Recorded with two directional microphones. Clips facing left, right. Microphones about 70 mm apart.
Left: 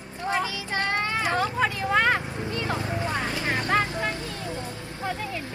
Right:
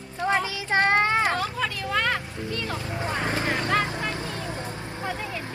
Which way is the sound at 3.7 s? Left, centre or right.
Left.